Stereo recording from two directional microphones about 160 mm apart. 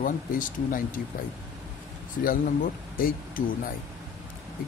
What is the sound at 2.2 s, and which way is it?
Speech, 60° left (ahead or behind).